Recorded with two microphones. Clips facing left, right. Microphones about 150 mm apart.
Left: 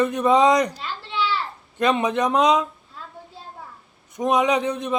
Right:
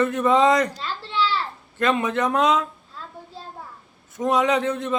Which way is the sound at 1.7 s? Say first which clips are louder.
Left 1 dB; 15° left (ahead or behind).